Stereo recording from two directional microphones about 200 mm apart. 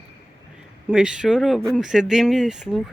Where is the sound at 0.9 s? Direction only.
5° right (ahead or behind).